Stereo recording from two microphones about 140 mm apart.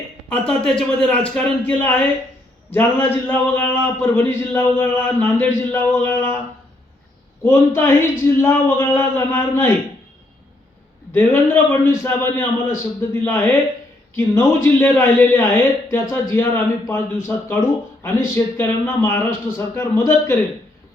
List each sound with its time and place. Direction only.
0.3 s a man's voice: 5° left (ahead or behind)
7.4 s speech: 20° left (ahead or behind)
11.1 s a man's voice: 15° left (ahead or behind)